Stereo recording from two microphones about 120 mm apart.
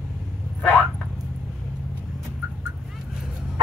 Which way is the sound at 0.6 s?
10° left (ahead or behind).